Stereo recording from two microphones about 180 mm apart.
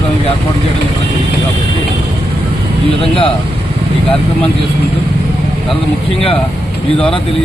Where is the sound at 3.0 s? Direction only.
30° left (ahead or behind).